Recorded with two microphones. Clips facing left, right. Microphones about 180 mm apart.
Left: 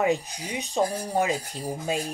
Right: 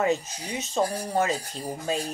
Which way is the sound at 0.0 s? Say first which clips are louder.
Left 1 dB; 15° left (ahead or behind).